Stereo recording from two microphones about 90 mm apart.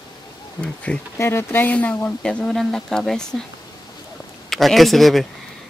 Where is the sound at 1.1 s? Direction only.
30° left (ahead or behind); by 3.4 s 5° left (ahead or behind).